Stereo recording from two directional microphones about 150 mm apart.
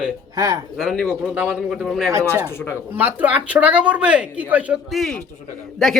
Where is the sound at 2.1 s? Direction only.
20° right (ahead or behind).